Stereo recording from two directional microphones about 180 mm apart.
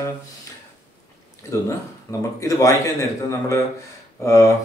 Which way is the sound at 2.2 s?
15° left (ahead or behind).